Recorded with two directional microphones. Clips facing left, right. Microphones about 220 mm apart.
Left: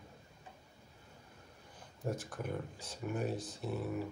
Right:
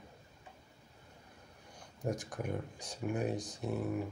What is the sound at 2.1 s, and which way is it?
Speech, 15° right (ahead or behind).